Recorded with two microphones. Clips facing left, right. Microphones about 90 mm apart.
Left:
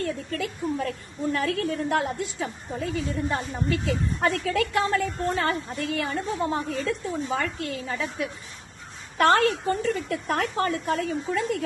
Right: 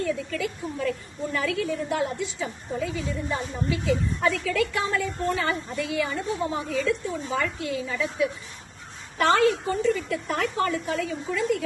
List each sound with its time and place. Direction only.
0.3 s a woman's voice: 50° left (ahead or behind)